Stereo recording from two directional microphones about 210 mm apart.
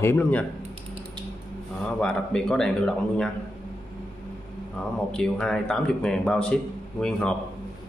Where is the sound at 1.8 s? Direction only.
5° left (ahead or behind).